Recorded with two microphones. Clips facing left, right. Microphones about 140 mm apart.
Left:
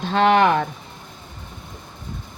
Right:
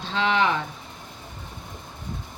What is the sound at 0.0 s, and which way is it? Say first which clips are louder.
Speech: left 7 dB; 55° left (ahead or behind).